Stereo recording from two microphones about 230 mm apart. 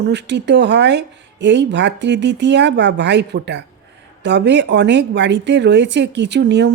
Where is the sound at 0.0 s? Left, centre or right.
Right.